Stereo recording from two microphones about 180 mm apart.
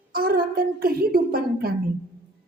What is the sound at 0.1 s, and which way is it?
A woman's voice, 55° right (ahead or behind).